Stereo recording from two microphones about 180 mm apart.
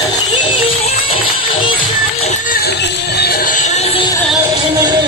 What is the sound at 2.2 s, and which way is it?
Music, 40° left (ahead or behind).